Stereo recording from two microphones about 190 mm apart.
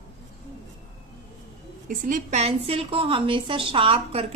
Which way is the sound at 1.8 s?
45° right (ahead or behind).